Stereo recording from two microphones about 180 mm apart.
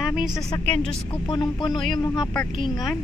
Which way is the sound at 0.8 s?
25° left (ahead or behind).